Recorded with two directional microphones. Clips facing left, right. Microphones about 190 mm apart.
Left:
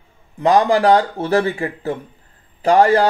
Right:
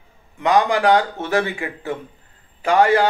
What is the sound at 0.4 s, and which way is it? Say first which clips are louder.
Speech: left 3 dB; 35° left (ahead or behind).